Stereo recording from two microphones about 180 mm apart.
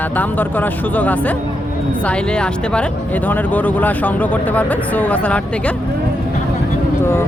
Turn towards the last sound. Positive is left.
turn(degrees=15)  # may be behind; listen again after turning